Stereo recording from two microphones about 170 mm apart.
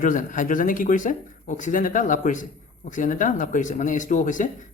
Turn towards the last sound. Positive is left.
turn(degrees=50)  # may be behind; listen again after turning